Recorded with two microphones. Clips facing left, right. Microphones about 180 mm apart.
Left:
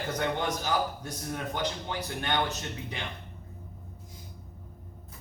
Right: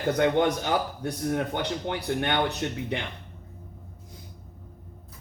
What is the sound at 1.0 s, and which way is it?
Speech, 65° right (ahead or behind).